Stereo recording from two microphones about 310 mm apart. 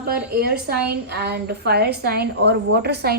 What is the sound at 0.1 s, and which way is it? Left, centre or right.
A woman's voice, right.